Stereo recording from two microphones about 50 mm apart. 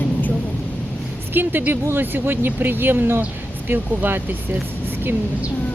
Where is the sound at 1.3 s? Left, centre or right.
Right.